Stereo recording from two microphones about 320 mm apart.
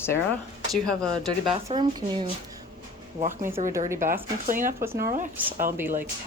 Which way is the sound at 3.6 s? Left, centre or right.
Right.